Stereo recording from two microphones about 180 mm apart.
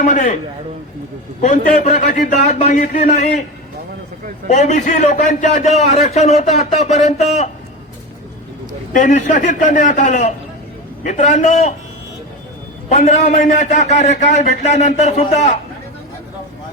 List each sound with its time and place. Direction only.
0.0 s a man's voice: 45° left (ahead or behind)
1.4 s a man's voice: 40° left (ahead or behind)
4.4 s a man's voice: 40° left (ahead or behind)
8.9 s a man's voice: 45° left (ahead or behind)
12.9 s a man's voice: 35° left (ahead or behind)